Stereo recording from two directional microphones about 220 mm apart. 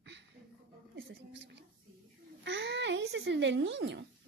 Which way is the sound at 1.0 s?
55° right (ahead or behind).